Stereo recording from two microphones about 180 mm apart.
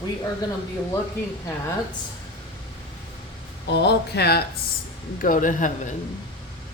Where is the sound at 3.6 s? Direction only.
70° left (ahead or behind).